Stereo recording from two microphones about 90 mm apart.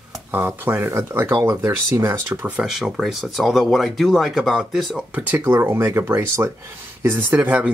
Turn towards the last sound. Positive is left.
turn(degrees=-20)  # may be behind; listen again after turning